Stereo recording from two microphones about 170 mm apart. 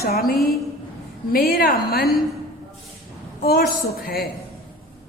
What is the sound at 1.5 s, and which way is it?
Speech, 65° left (ahead or behind).